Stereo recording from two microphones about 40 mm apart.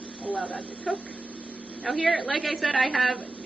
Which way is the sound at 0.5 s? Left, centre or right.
Left.